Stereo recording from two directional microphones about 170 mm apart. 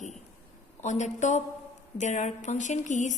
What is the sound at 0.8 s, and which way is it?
A woman's voice, 45° left (ahead or behind).